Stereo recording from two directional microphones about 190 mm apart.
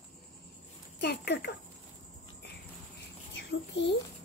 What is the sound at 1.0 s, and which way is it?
Speech, 60° left (ahead or behind).